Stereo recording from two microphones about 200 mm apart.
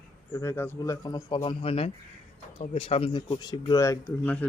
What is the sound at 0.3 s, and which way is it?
Speech, 10° left (ahead or behind).